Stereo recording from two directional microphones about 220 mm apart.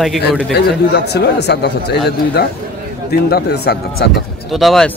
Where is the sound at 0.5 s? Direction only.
50° left (ahead or behind).